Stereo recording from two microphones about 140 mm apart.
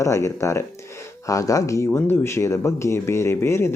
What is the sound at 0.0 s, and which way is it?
Speech, 20° left (ahead or behind).